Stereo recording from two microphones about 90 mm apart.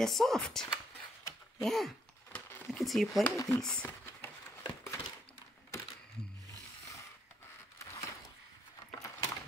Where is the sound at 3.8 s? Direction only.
20° left (ahead or behind).